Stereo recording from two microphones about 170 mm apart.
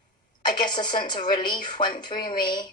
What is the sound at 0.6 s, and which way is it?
Speech, 25° left (ahead or behind).